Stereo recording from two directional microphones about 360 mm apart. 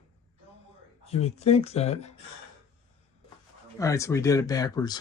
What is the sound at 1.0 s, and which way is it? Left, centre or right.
Speech, centre.